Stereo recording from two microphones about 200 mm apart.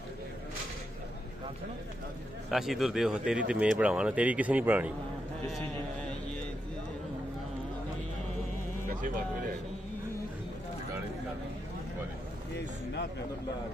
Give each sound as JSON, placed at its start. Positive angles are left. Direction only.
{"t": 2.5, "sound": "speech", "side_deg": 0}
{"t": 8.8, "sound": "speech", "side_deg": -40}